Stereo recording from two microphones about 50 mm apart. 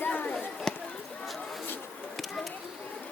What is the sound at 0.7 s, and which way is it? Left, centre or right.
Chop, centre.